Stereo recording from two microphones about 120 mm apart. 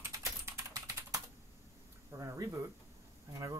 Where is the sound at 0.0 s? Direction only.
25° right (ahead or behind).